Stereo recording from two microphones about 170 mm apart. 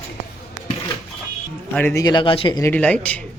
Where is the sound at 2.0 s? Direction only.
25° left (ahead or behind).